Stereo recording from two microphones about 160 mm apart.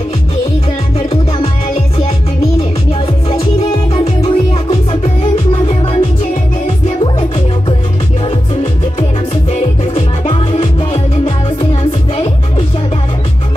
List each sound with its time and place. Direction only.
0.9 s music: 40° left (ahead or behind)
2.9 s music: 35° left (ahead or behind)
9.5 s music: 35° left (ahead or behind)